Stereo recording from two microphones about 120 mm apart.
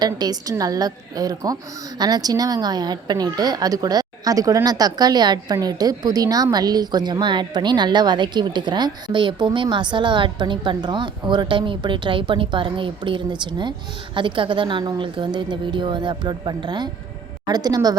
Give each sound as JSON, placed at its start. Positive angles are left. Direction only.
{"t": 0.0, "sound": "a woman's voice", "side_deg": -35}